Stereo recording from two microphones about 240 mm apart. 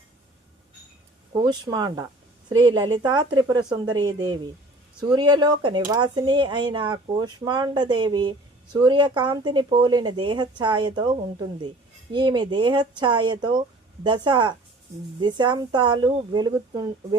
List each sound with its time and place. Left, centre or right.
1.3 s speech: centre